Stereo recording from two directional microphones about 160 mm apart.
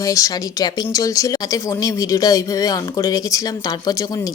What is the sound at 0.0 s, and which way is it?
Speech, 20° left (ahead or behind).